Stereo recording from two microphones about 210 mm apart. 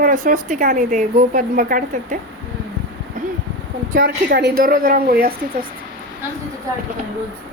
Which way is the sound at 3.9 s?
45° right (ahead or behind).